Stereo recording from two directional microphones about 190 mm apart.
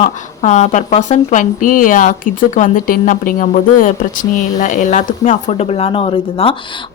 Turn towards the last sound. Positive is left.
turn(degrees=30)  # may be behind; listen again after turning